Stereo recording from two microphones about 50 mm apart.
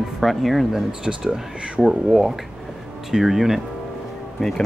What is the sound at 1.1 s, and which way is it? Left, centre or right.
Speech, centre.